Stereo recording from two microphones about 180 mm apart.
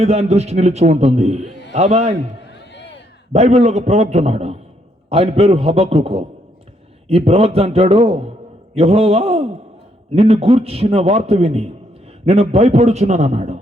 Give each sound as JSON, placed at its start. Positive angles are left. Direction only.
{"t": 0.0, "sound": "a man's voice", "side_deg": -35}
{"t": 3.3, "sound": "a man's voice", "side_deg": -35}